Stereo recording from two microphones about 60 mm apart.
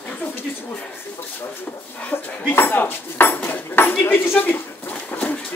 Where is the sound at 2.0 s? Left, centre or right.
Left.